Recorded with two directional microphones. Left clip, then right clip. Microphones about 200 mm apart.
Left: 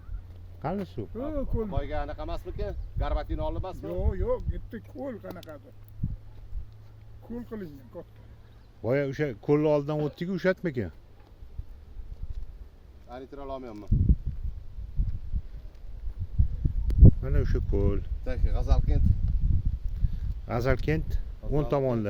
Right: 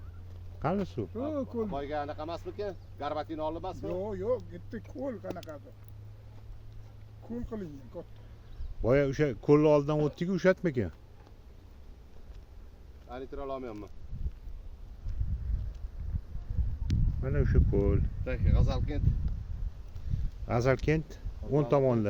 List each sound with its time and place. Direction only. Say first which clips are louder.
0.6 s speech: right 1 dB; 5° right (ahead or behind)
1.2 s speech: left 2 dB; 45° left (ahead or behind)
1.7 s speech: even; 15° left (ahead or behind)
4.0 s speech: left 2 dB; 45° left (ahead or behind)
7.3 s speech: left 1 dB; 45° left (ahead or behind)
8.8 s speech: right 1 dB; centre (ahead or behind)
13.1 s speech: even; 70° left (ahead or behind)
17.2 s speech: right 1 dB; 10° left (ahead or behind)
18.3 s speech: right 1 dB; 70° left (ahead or behind)
18.7 s speech: left 1 dB; 35° left (ahead or behind)
20.5 s speech: even; 5° left (ahead or behind)